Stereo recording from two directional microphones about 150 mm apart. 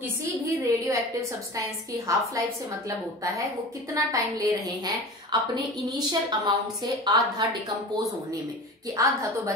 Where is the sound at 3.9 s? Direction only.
20° right (ahead or behind).